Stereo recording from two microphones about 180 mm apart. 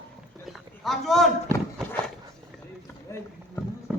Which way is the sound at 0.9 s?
Centre (ahead or behind).